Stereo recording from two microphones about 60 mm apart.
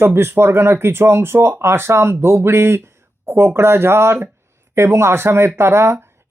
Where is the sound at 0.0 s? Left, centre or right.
Right.